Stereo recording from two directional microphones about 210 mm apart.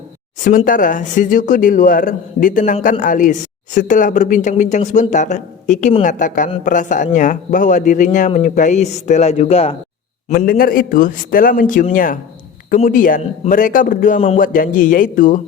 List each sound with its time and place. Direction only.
0.3 s a woman's voice: 40° left (ahead or behind)
10.2 s a woman's voice: 45° left (ahead or behind)